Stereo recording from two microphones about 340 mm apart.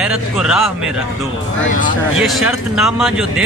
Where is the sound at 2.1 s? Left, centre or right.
Centre.